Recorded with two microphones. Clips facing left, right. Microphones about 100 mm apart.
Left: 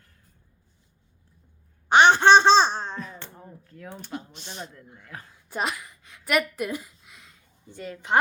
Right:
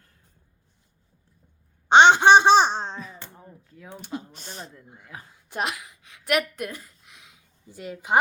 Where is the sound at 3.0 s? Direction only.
Centre (ahead or behind).